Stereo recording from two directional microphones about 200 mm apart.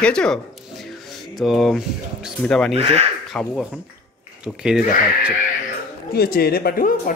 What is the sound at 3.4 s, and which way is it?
Speech, 5° left (ahead or behind).